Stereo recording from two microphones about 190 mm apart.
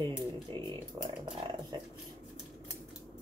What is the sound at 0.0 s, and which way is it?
Speech, 25° right (ahead or behind).